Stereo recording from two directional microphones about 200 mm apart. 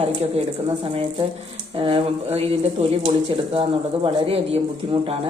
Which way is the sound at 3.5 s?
30° right (ahead or behind).